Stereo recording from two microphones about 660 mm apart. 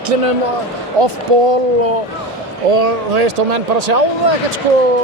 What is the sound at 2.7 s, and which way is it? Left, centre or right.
Speech, right.